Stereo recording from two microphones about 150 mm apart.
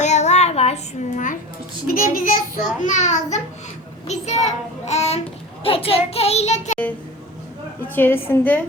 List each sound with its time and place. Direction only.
0.0 s child singing: 50° left (ahead or behind)
1.9 s a child's voice: 70° left (ahead or behind)
2.8 s a child's voice: 55° left (ahead or behind)
7.9 s a woman's voice: 15° left (ahead or behind)